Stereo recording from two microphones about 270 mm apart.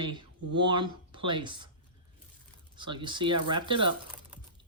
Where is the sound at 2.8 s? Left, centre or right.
Centre.